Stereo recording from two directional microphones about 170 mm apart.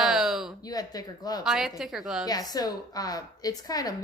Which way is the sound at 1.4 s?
Centre (ahead or behind).